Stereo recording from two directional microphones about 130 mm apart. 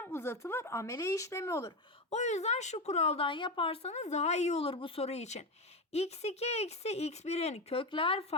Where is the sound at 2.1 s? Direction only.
60° left (ahead or behind).